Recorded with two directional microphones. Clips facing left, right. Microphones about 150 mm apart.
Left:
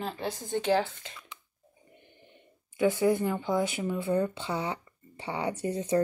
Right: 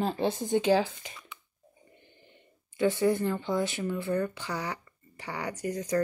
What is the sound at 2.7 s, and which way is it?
Speech, 15° left (ahead or behind).